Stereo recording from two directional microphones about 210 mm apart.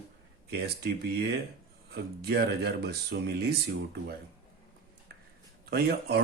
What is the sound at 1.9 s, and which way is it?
A man's voice, 50° right (ahead or behind).